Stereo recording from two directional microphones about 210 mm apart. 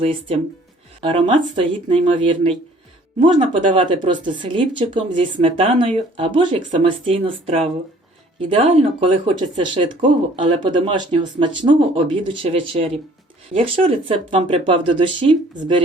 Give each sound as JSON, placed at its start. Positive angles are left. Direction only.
{"t": 0.0, "sound": "speech", "side_deg": -25}